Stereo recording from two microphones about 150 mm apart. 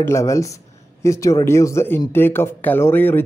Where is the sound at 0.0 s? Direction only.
20° left (ahead or behind).